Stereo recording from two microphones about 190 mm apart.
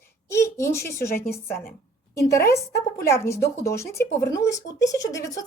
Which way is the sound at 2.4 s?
55° left (ahead or behind).